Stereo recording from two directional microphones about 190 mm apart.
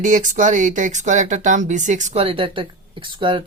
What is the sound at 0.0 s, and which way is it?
A woman's voice, 40° right (ahead or behind).